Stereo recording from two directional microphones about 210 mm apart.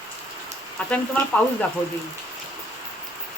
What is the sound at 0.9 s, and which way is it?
Speech, 5° left (ahead or behind).